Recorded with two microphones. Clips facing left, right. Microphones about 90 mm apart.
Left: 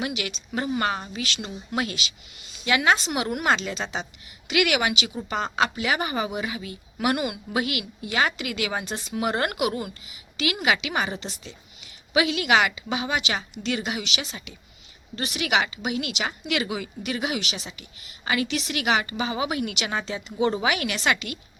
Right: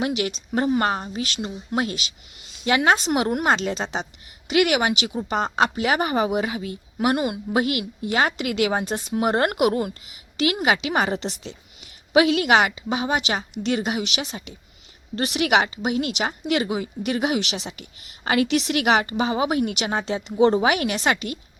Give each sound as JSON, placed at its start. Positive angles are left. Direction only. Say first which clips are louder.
{"t": 0.1, "sound": "a woman's voice", "louder": "right 6 dB", "side_deg": -40}
{"t": 11.0, "sound": "a woman's voice", "louder": "right 6 dB", "side_deg": -60}
{"t": 12.1, "sound": "a woman's voice", "louder": "right 4 dB", "side_deg": -50}
{"t": 17.6, "sound": "a woman's voice", "louder": "right 5 dB", "side_deg": -60}
{"t": 20.1, "sound": "a woman's voice", "louder": "right 6 dB", "side_deg": -60}
{"t": 20.4, "sound": "a woman's voice", "louder": "right 6 dB", "side_deg": -45}